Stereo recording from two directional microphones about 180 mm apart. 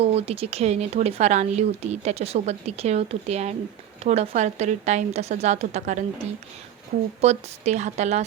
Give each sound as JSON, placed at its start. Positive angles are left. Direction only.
{"t": 0.0, "sound": "speech", "side_deg": -35}
{"t": 7.2, "sound": "speech", "side_deg": -35}